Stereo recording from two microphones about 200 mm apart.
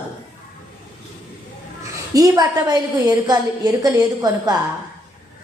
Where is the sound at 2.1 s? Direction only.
20° right (ahead or behind).